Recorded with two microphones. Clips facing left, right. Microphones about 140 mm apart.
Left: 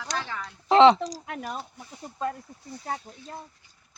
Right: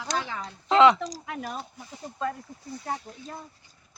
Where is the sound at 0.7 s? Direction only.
25° left (ahead or behind).